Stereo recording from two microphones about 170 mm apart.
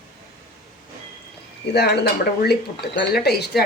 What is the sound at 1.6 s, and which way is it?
Speech, 80° left.